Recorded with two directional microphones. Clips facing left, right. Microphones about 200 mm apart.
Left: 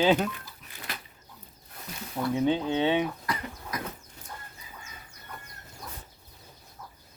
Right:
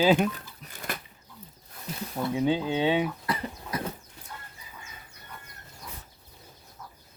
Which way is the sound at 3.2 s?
30° right (ahead or behind).